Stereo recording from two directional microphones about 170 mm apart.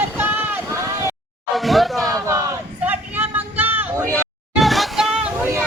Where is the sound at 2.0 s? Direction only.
20° right (ahead or behind).